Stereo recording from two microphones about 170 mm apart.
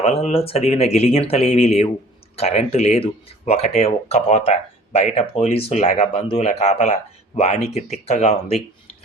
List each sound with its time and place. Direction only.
0.0 s speech: 35° left (ahead or behind)